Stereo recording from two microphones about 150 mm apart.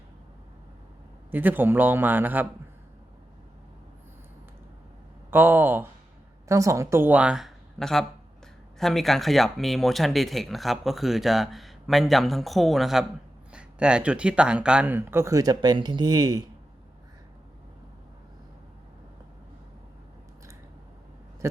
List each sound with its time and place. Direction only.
1.3 s speech: 10° right (ahead or behind)
5.3 s speech: 15° right (ahead or behind)
21.4 s a sound: 20° right (ahead or behind)